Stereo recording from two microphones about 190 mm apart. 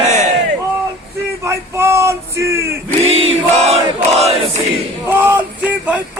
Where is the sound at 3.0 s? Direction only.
30° right (ahead or behind).